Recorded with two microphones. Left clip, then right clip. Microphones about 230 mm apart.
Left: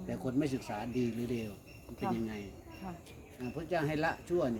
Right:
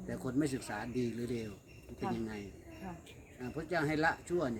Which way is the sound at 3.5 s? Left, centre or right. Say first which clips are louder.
Even; centre.